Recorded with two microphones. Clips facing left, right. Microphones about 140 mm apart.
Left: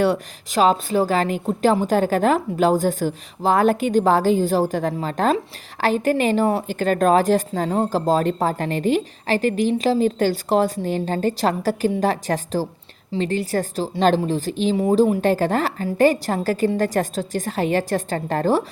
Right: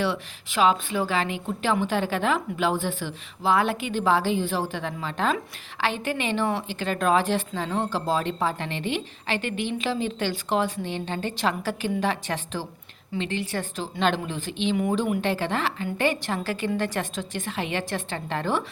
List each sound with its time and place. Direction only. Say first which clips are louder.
0.0 s a woman's voice: left 7 dB; 40° left (ahead or behind)